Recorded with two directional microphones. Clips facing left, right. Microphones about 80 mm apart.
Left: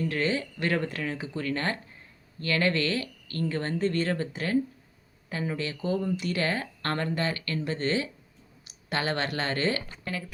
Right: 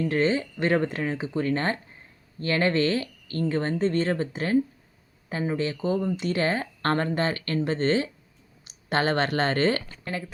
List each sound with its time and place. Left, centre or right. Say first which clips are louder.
0.0 s speech: right 4 dB; right